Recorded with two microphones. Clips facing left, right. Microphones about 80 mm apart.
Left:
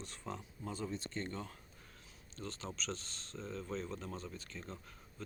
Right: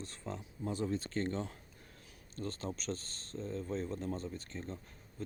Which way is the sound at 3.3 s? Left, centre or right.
Left.